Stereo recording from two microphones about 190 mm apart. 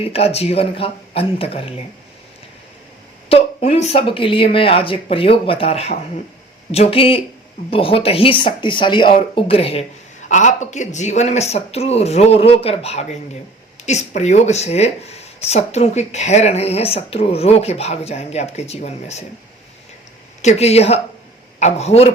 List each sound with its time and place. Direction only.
0.0 s speech: 30° left (ahead or behind)
3.2 s speech: 30° left (ahead or behind)
20.4 s speech: 35° left (ahead or behind)